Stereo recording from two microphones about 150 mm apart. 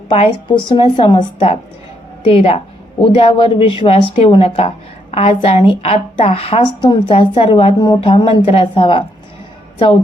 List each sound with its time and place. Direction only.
0.1 s a woman's voice: 40° left (ahead or behind)